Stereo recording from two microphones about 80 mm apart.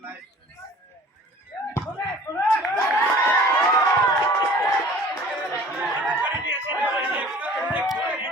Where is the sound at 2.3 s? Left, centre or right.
Left.